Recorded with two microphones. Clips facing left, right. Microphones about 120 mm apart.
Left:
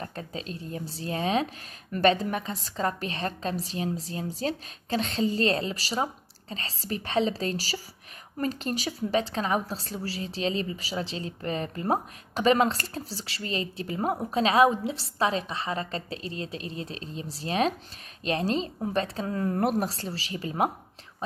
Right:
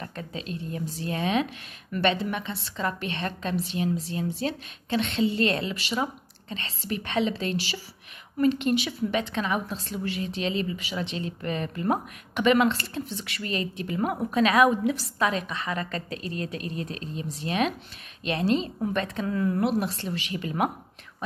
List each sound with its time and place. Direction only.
0.0 s a woman's voice: 35° left (ahead or behind)
19.9 s a woman's voice: 35° left (ahead or behind)